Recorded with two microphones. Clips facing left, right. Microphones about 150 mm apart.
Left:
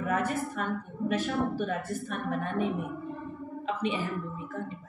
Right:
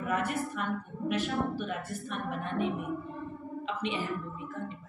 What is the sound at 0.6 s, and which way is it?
A woman's voice, 40° left (ahead or behind).